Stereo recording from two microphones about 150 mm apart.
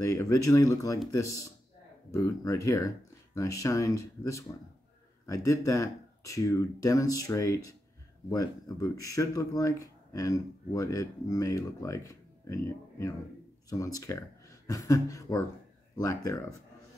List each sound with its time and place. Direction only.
0.0 s speech: 20° left (ahead or behind)